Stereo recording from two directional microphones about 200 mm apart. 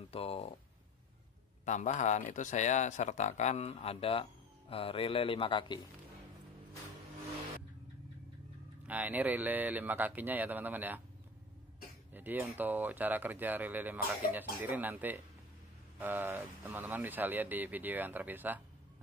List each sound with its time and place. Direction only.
0.1 s speech: 30° left (ahead or behind)
1.7 s speech: 35° left (ahead or behind)
8.8 s speech: 10° right (ahead or behind)
12.1 s speech: 10° right (ahead or behind)